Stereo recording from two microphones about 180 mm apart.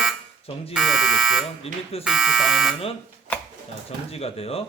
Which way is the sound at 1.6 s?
35° left (ahead or behind).